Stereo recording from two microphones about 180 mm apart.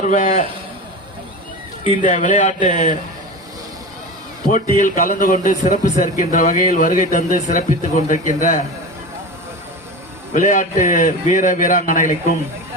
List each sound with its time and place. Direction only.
0.0 s speech: 45° left (ahead or behind)
2.0 s speech: 45° left (ahead or behind)
4.4 s speech: 45° left (ahead or behind)
10.3 s speech: 45° left (ahead or behind)